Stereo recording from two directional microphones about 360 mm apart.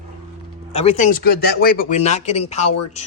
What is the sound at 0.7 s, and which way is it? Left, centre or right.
Speech, centre.